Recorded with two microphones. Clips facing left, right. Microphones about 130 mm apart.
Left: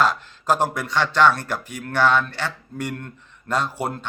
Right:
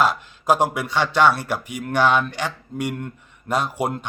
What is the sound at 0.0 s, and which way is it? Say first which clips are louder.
Speech: right 1 dB; 10° right (ahead or behind).